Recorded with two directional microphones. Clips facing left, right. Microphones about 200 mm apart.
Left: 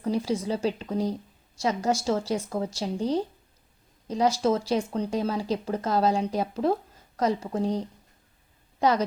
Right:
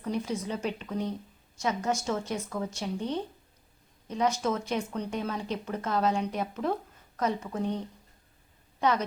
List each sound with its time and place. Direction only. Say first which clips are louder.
0.0 s a woman's voice: left 5 dB; 35° left (ahead or behind)